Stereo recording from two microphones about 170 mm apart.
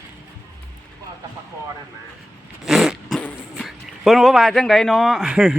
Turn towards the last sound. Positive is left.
turn(degrees=-5)  # may be behind; listen again after turning